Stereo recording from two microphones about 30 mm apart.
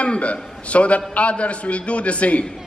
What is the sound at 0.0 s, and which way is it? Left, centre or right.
A man's voice, left.